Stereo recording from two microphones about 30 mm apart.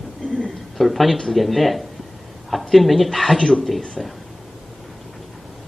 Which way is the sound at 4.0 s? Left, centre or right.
Centre.